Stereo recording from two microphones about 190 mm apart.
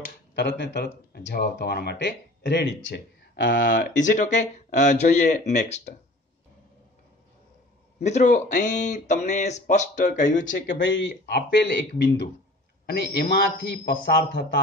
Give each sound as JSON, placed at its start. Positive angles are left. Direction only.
{"t": 0.4, "sound": "speech", "side_deg": 60}
{"t": 3.6, "sound": "speech", "side_deg": 40}
{"t": 8.0, "sound": "speech", "side_deg": 35}
{"t": 10.7, "sound": "speech", "side_deg": 70}